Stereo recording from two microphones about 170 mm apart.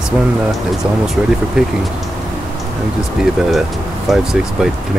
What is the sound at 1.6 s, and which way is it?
Speech, 5° right (ahead or behind).